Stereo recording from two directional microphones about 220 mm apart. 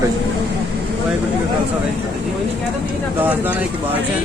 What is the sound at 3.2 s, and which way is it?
Speech, 10° right (ahead or behind).